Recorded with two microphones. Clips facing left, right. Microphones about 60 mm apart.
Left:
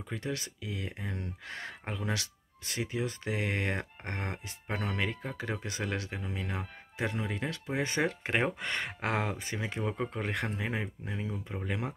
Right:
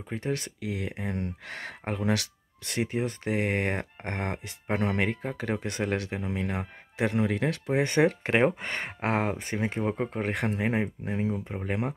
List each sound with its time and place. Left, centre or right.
0.1 s speech: right
0.4 s speech: right
8.5 s speech: right
9.8 s speech: right
10.2 s speech: right
10.5 s speech: right